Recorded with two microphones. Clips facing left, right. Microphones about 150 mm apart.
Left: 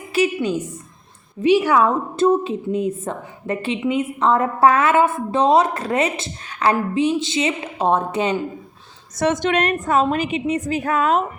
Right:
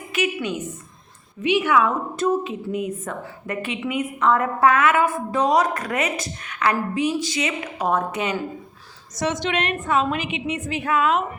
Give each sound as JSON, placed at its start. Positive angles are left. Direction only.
{"t": 0.1, "sound": "a sound", "side_deg": 35}
{"t": 1.4, "sound": "a woman's voice", "side_deg": 35}
{"t": 9.1, "sound": "a woman's voice", "side_deg": 55}